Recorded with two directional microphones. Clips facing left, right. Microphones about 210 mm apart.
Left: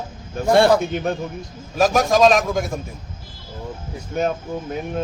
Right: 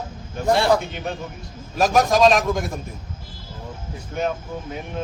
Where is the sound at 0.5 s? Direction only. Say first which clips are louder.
Left 5 dB; 55° left (ahead or behind).